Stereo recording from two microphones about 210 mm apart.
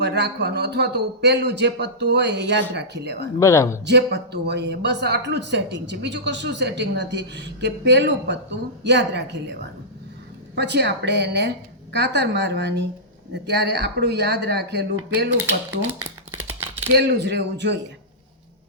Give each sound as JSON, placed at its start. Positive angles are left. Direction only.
{"t": 0.0, "sound": "a man's voice", "side_deg": -50}
{"t": 3.4, "sound": "speech", "side_deg": 15}
{"t": 3.8, "sound": "speech", "side_deg": -55}
{"t": 10.5, "sound": "a man's voice", "side_deg": -55}
{"t": 15.9, "sound": "shuffling cards", "side_deg": -10}
{"t": 16.9, "sound": "speech", "side_deg": -55}